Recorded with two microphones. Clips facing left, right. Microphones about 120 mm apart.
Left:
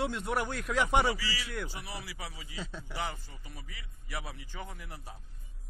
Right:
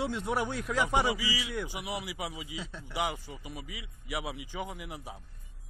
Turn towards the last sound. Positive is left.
turn(degrees=-15)  # may be behind; listen again after turning